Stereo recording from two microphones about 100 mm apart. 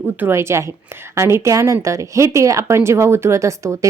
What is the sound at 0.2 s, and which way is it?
A woman's voice, 25° right (ahead or behind).